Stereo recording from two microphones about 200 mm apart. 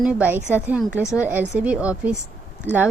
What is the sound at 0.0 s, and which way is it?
A woman's voice, 5° right (ahead or behind).